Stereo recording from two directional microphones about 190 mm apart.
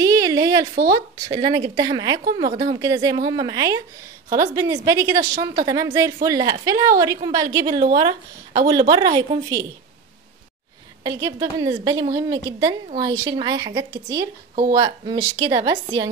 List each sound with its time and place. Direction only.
0.0 s a sound: 20° right (ahead or behind)
0.9 s a woman's voice: 20° right (ahead or behind)
11.1 s a woman's voice: 20° right (ahead or behind)